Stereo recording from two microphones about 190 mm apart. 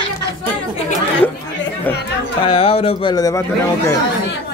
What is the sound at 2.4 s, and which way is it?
Speech, 30° left (ahead or behind).